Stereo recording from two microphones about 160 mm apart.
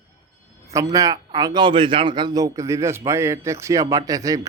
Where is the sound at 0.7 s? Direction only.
20° right (ahead or behind).